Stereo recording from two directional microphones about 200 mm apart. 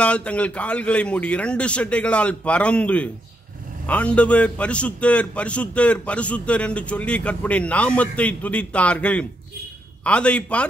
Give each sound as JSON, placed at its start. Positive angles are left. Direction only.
{"t": 0.0, "sound": "a man's voice", "side_deg": 5}